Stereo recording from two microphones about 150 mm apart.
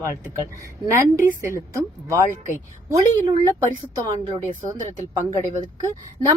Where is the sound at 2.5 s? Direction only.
20° right (ahead or behind).